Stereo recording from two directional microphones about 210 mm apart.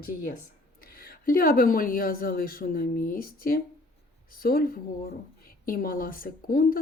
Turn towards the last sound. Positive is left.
turn(degrees=45)  # may be behind; listen again after turning